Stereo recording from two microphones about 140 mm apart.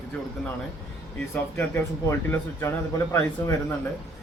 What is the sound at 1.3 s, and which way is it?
Speech, 15° left (ahead or behind).